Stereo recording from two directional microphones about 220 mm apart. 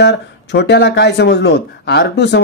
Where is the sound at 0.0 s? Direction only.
50° left (ahead or behind).